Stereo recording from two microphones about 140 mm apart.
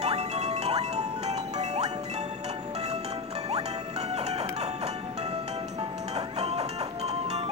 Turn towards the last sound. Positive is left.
turn(degrees=-50)  # may be behind; listen again after turning